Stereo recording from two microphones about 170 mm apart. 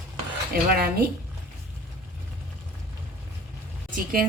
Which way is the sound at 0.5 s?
60° right (ahead or behind).